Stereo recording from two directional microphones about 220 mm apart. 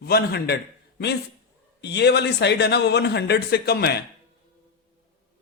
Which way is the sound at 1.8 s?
50° left (ahead or behind).